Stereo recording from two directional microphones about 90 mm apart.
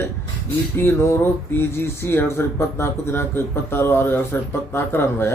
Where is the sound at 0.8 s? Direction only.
30° left (ahead or behind).